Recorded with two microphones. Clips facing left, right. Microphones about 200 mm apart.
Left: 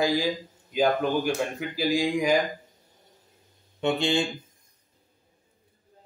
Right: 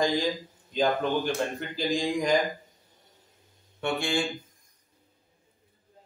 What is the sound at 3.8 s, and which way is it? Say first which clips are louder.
Mantra: left 4 dB; 20° left (ahead or behind).